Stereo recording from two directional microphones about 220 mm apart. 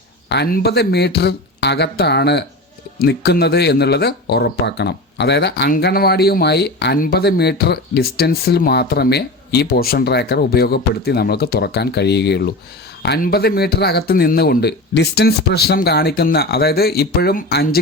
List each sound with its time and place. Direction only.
0.3 s speech: 50° left (ahead or behind)